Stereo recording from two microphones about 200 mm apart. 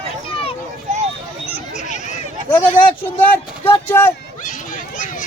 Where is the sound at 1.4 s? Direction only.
35° left (ahead or behind).